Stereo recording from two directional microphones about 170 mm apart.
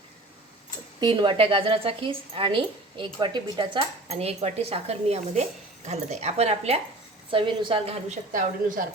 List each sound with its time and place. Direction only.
0.9 s a woman's voice: 25° right (ahead or behind)
8.3 s a woman's voice: 50° right (ahead or behind)